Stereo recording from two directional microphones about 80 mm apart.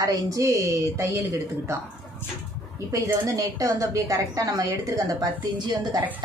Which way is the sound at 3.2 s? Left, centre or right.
Right.